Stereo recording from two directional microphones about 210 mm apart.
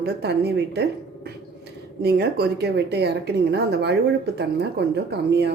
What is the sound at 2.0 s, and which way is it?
Speech, 50° right (ahead or behind).